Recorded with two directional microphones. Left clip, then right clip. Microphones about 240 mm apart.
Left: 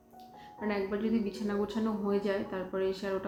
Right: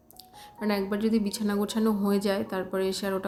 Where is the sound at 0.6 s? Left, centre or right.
Right.